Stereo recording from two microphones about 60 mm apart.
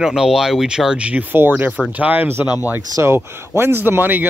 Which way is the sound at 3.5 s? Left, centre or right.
Right.